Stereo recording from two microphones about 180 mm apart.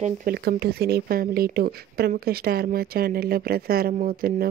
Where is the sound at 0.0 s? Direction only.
55° right (ahead or behind).